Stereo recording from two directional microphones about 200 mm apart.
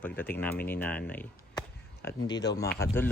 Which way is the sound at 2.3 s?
20° left (ahead or behind).